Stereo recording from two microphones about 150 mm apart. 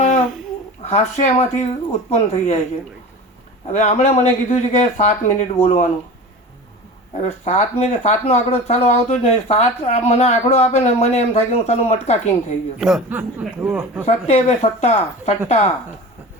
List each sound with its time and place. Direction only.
0.9 s speech: 45° left (ahead or behind)
3.7 s speech: 50° left (ahead or behind)
7.2 s speech: 45° left (ahead or behind)
12.8 s speech: 5° right (ahead or behind)
14.1 s speech: 50° left (ahead or behind)